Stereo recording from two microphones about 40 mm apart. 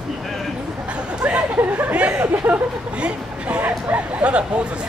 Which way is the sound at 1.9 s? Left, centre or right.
Right.